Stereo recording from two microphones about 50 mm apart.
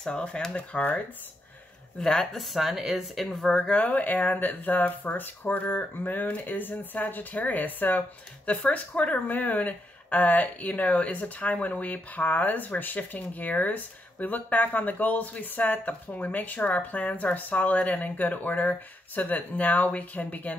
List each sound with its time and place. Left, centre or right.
0.0 s speech: centre
2.0 s speech: centre
3.8 s speech: left
8.5 s speech: left